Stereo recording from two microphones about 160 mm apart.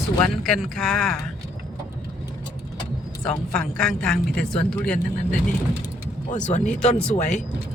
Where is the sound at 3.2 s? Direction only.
5° left (ahead or behind).